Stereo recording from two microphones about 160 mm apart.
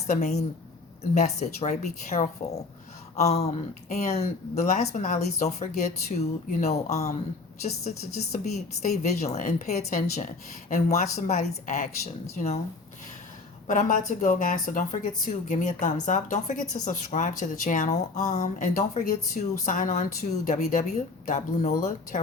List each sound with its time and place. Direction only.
0.1 s a woman's voice: 45° left (ahead or behind)
13.7 s a woman's voice: 55° left (ahead or behind)